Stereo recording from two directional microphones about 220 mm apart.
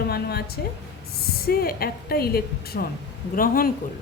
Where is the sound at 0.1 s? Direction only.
45° left (ahead or behind).